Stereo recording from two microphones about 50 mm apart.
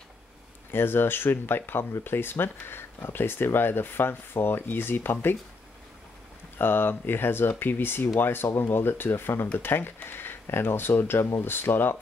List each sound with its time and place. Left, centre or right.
0.7 s speech: left
6.6 s speech: left